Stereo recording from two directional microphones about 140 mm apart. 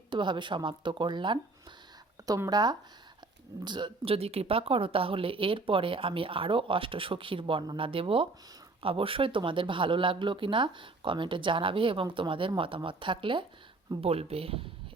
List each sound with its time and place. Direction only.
0.1 s speech: 35° right (ahead or behind)